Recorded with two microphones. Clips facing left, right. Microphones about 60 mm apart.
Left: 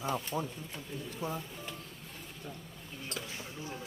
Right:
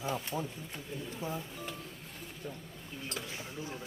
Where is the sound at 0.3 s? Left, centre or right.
Left.